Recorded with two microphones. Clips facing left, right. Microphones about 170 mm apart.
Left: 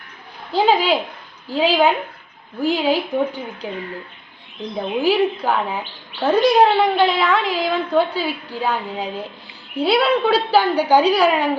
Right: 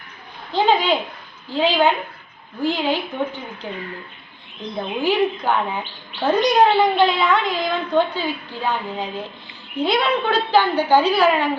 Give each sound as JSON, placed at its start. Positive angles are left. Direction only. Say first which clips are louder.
{"t": 0.5, "sound": "a woman's voice", "louder": "left 1 dB", "side_deg": 5}
{"t": 5.0, "sound": "a woman's voice", "louder": "left 1 dB", "side_deg": 5}